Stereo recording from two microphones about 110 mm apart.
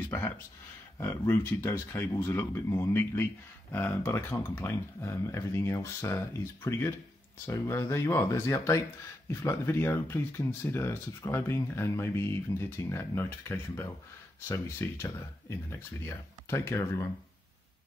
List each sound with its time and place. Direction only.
0.9 s speech: 25° left (ahead or behind)